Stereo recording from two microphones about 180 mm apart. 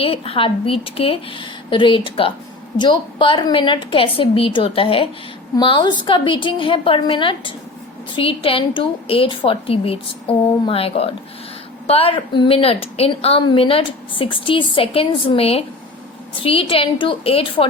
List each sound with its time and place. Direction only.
0.0 s a woman's voice: 30° left (ahead or behind)